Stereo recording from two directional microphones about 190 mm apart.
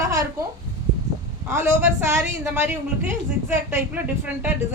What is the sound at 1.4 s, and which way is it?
A woman's voice, 15° right (ahead or behind).